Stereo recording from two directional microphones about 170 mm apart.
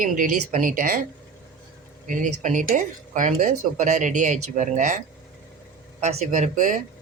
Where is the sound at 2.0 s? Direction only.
50° right (ahead or behind).